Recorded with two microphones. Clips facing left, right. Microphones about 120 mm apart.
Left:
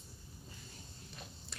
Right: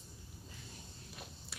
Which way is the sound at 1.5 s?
5° right (ahead or behind).